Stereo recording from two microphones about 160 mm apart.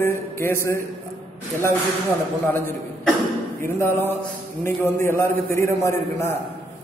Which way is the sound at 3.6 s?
15° left (ahead or behind).